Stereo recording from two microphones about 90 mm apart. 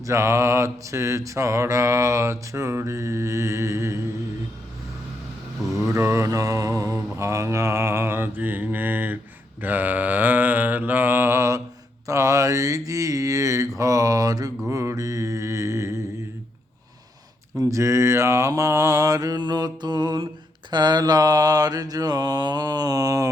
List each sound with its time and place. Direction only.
0.0 s mantra: 35° right (ahead or behind)
5.7 s mantra: 35° right (ahead or behind)
17.6 s mantra: 35° right (ahead or behind)